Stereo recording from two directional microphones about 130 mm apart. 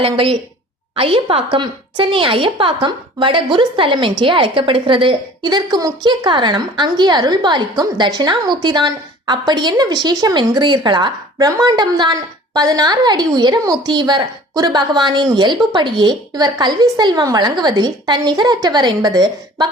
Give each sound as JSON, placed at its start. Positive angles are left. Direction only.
{"t": 0.0, "sound": "a woman's voice", "side_deg": -45}